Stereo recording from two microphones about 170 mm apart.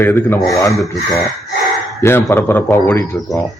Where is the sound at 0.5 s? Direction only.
20° left (ahead or behind).